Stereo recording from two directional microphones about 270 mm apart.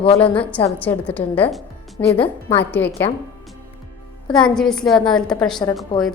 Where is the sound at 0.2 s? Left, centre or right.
Centre.